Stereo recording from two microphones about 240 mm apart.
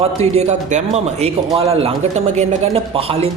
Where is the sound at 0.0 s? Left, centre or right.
Right.